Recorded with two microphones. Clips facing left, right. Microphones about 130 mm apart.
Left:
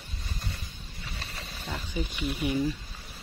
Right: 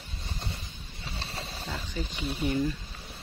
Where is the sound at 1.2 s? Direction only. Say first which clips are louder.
Right 6 dB; 30° right (ahead or behind).